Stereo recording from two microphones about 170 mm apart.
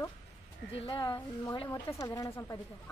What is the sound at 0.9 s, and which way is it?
A woman's voice, 25° left (ahead or behind).